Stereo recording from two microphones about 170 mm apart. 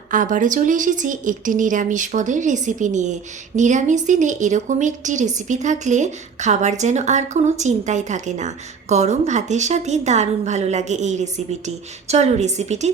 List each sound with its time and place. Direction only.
0.1 s speech: 50° right (ahead or behind)